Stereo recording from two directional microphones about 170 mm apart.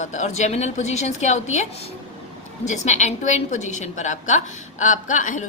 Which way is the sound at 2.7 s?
45° left (ahead or behind).